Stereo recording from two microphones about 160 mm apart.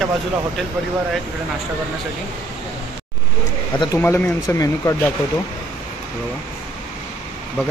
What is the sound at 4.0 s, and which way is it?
Speech, 10° left (ahead or behind).